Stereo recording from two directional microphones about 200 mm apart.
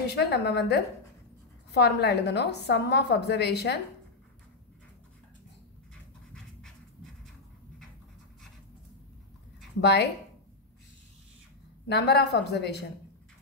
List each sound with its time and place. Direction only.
0.1 s a woman's voice: 55° left (ahead or behind)
9.8 s a woman's voice: 60° left (ahead or behind)
11.9 s a woman's voice: 55° left (ahead or behind)